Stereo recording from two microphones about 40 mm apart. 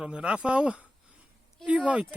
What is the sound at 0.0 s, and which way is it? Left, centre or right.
Speech, right.